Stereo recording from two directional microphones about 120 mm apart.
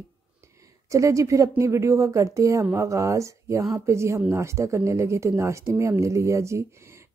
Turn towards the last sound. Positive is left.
turn(degrees=-25)  # may be behind; listen again after turning